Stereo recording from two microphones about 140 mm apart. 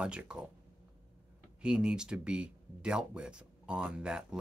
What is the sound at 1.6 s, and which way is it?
Speech, 5° right (ahead or behind).